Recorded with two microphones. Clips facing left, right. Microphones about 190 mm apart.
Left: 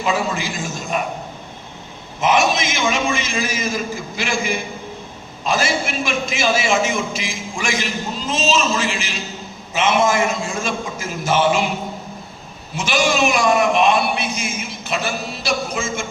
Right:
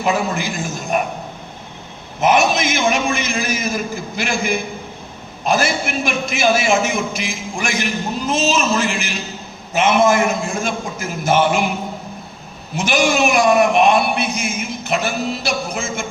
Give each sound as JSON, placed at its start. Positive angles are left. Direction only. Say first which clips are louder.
{"t": 0.0, "sound": "a man's voice", "louder": "right 2 dB", "side_deg": -60}
{"t": 2.2, "sound": "a man's voice", "louder": "right 2 dB", "side_deg": -60}
{"t": 5.5, "sound": "a man's voice", "louder": "right 2 dB", "side_deg": -60}
{"t": 12.7, "sound": "a man's voice", "louder": "right 2 dB", "side_deg": -60}